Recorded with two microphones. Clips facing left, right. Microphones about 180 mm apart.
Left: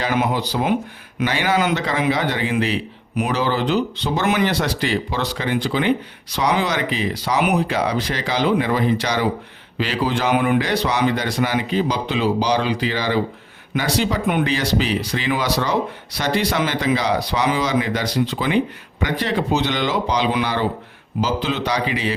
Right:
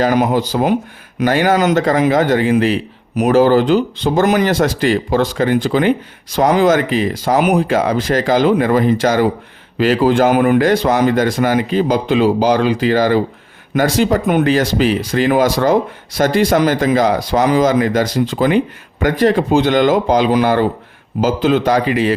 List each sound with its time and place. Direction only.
0.0 s speech: 45° right (ahead or behind)